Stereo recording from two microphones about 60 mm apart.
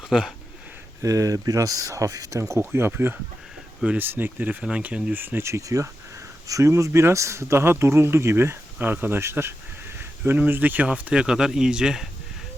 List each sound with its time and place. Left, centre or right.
0.1 s speech: centre
1.0 s speech: right
2.5 s speech: right
4.8 s speech: centre
5.1 s speech: right
5.4 s speech: right
8.8 s speech: right
10.0 s speech: right
11.2 s speech: centre